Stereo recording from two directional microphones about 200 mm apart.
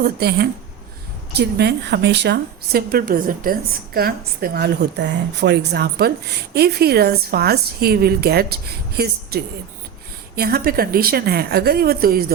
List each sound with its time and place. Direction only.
0.0 s a woman's voice: 55° right (ahead or behind)